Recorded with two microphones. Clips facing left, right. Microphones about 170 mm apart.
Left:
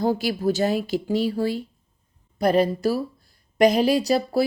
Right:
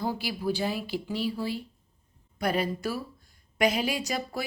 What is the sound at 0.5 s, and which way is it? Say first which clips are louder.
Speech: left 8 dB; 45° left (ahead or behind).